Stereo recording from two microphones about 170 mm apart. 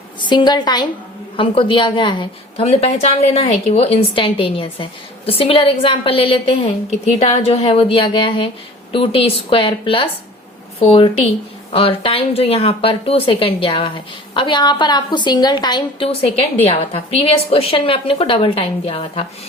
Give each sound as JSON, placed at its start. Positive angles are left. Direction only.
{"t": 0.2, "sound": "a woman's voice", "side_deg": 25}